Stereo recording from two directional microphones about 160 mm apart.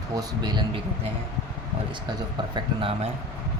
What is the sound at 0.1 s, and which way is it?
Speech, 25° right (ahead or behind).